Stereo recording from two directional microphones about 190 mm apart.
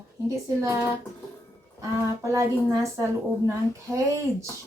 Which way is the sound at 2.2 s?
15° right (ahead or behind).